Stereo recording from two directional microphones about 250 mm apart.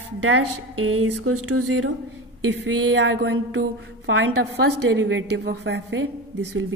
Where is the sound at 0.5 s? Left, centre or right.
Right.